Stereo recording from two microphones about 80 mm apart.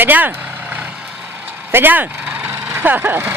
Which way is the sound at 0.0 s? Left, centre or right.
Right.